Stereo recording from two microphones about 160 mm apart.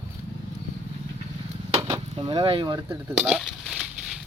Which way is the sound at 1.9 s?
35° right (ahead or behind).